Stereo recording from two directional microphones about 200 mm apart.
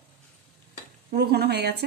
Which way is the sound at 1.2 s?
55° right (ahead or behind).